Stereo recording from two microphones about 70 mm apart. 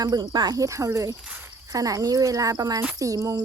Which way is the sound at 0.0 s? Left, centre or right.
Right.